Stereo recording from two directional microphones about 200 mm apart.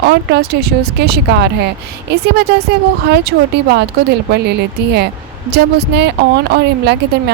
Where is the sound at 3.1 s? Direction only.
55° right (ahead or behind).